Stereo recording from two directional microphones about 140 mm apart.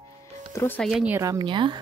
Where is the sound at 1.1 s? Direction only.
25° right (ahead or behind).